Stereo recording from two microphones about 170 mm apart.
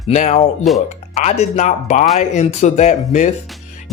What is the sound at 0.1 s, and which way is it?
Speech, 45° left (ahead or behind).